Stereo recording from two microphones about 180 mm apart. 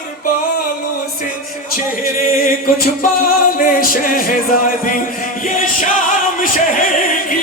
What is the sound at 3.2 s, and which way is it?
Music, 50° left (ahead or behind).